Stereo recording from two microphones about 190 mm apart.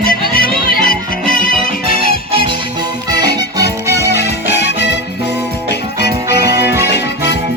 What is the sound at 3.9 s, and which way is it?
Music, 60° left (ahead or behind).